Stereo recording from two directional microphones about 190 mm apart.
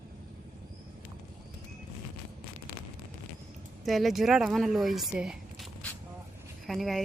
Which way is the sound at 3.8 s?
Centre (ahead or behind).